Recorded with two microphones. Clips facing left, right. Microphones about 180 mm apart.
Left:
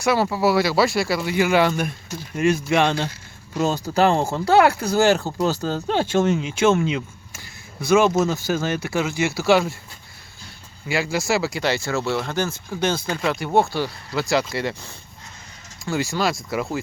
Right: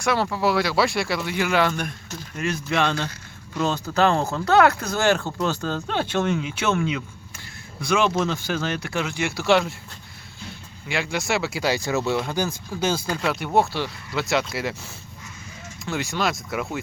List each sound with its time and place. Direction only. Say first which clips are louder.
0.0 s speech: left 3 dB; 10° left (ahead or behind)
3.5 s speech: left 2 dB; 35° left (ahead or behind)
7.3 s a sound: left 2 dB; centre (ahead or behind)
8.1 s speech: left 4 dB; 10° left (ahead or behind)
10.8 s speech: left 3 dB; 5° left (ahead or behind)